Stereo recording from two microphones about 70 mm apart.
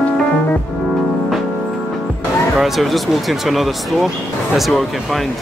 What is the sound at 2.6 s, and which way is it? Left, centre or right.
Speech, centre.